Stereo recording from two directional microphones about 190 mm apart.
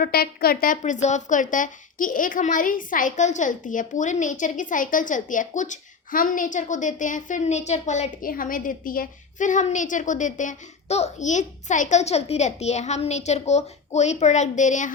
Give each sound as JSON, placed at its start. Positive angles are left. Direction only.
{"t": 0.0, "sound": "speech", "side_deg": 50}